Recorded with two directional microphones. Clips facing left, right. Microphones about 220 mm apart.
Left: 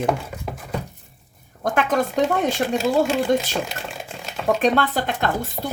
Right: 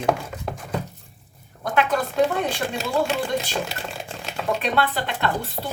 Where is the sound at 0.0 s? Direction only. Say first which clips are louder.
Even; 5° left (ahead or behind).